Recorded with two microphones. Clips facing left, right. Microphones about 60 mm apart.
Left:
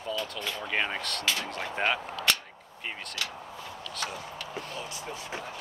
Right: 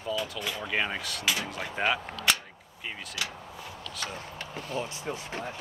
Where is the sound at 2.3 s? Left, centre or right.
Centre.